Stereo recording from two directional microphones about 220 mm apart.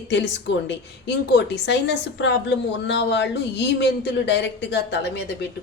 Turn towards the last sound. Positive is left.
turn(degrees=50)  # may be behind; listen again after turning